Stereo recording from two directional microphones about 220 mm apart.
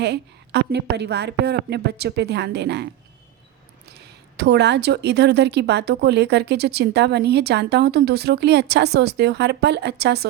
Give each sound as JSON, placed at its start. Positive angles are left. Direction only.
{"t": 0.0, "sound": "a woman's voice", "side_deg": -50}